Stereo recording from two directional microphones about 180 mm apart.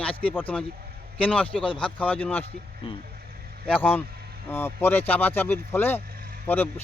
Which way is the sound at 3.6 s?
10° left (ahead or behind).